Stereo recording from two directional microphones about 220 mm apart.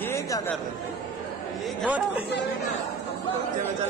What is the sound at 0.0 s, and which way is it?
Chatter, 10° left (ahead or behind).